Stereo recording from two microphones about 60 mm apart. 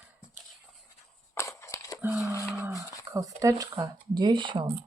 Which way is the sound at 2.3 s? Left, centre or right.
Right.